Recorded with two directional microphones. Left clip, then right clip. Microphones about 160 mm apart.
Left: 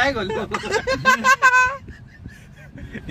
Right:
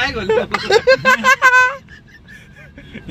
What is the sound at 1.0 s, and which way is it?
Speech, centre (ahead or behind).